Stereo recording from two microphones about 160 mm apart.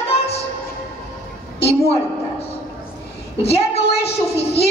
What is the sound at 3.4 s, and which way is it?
Speech, 40° left (ahead or behind).